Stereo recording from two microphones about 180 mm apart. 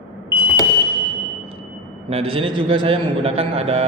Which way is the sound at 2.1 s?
35° right (ahead or behind).